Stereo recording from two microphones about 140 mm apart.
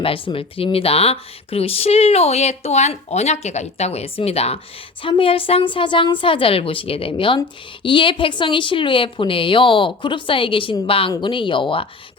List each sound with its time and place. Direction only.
0.0 s a woman's voice: 40° left (ahead or behind)